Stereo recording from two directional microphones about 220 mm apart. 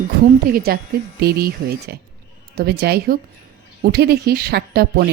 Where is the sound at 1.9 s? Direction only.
45° right (ahead or behind).